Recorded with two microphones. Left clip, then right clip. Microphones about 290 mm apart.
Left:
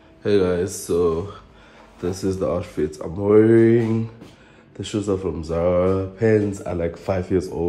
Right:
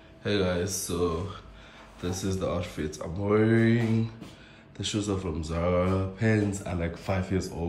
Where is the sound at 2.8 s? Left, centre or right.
Left.